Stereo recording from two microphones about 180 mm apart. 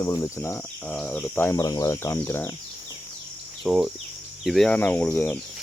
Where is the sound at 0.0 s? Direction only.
15° left (ahead or behind).